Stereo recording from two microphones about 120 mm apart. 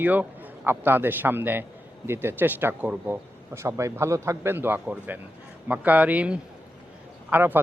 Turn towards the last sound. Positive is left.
turn(degrees=-15)  # may be behind; listen again after turning